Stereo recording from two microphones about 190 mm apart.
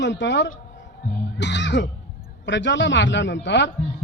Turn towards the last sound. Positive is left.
turn(degrees=65)  # may be behind; listen again after turning